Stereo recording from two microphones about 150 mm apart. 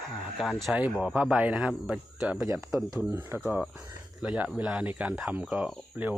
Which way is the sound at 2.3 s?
20° right (ahead or behind).